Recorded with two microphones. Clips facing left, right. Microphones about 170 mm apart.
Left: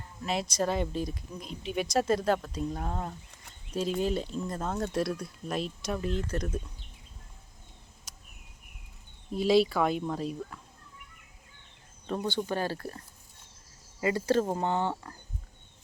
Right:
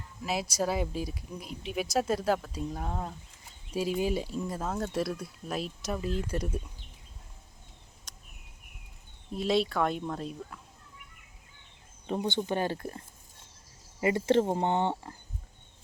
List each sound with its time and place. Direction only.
0.2 s speech: 5° right (ahead or behind)
8.1 s a sound: 5° left (ahead or behind)
9.3 s speech: centre (ahead or behind)
12.0 s speech: 20° right (ahead or behind)